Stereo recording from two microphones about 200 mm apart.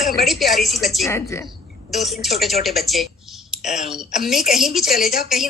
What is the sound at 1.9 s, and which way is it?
A woman's voice, centre (ahead or behind).